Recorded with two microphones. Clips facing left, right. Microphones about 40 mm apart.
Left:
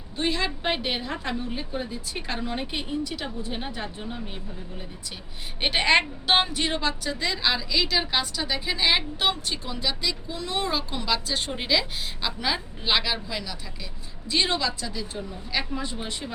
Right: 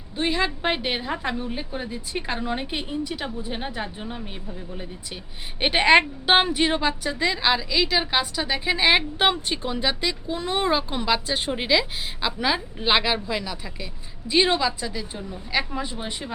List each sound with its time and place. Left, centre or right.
0.2 s a woman's voice: centre
5.5 s a woman's voice: centre